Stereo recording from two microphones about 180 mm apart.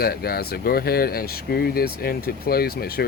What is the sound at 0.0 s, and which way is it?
Speech, 60° left (ahead or behind).